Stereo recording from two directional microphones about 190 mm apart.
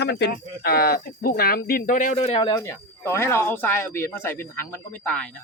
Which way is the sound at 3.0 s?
15° left (ahead or behind).